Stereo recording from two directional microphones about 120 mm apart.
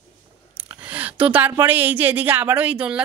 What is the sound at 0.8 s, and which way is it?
Speech, 10° right (ahead or behind).